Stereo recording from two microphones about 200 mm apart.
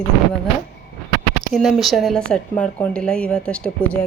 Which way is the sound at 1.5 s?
Centre (ahead or behind).